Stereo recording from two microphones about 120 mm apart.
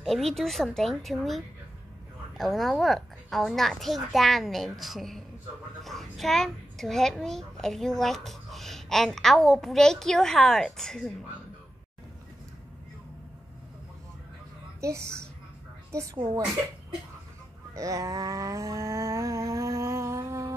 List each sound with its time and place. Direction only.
0.0 s a child's voice: centre (ahead or behind)
14.8 s a child's voice: 25° right (ahead or behind)
17.7 s a sound: 30° right (ahead or behind)